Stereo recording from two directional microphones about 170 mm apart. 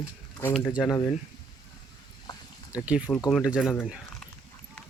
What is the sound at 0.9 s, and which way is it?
Speech, 15° left (ahead or behind).